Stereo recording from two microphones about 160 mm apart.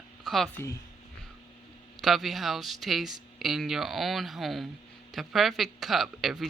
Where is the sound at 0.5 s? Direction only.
15° left (ahead or behind).